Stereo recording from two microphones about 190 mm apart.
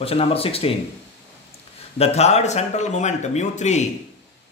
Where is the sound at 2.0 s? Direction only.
35° left (ahead or behind).